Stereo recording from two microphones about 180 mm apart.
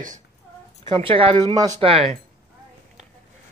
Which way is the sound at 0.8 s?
30° right (ahead or behind).